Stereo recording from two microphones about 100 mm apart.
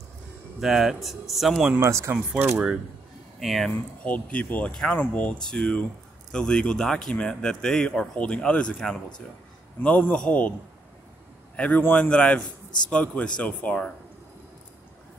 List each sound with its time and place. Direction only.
0.6 s speech: 5° right (ahead or behind)
1.7 s speech: 30° right (ahead or behind)
3.3 s speech: 5° left (ahead or behind)
4.0 s speech: 15° left (ahead or behind)
11.5 s speech: 15° left (ahead or behind)